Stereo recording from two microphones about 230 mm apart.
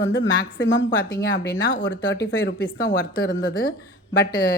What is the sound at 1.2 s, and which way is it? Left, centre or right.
A woman's voice, left.